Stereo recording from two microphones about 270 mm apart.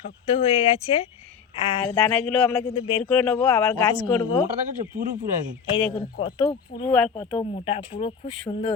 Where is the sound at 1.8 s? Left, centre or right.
Centre.